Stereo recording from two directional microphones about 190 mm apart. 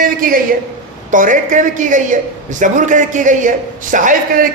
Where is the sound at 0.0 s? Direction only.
50° right (ahead or behind).